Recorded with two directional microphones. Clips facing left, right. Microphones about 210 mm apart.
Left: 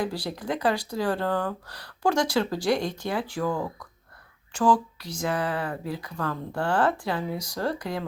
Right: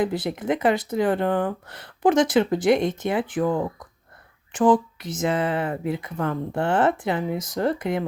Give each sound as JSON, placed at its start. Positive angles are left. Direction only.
{"t": 0.0, "sound": "speech", "side_deg": -20}